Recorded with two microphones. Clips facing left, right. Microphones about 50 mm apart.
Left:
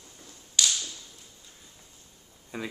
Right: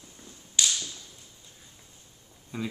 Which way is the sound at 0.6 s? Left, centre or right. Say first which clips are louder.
Left 1 dB; centre.